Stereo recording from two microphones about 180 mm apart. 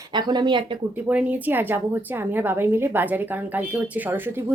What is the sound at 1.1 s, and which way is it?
A woman's voice, 10° right (ahead or behind).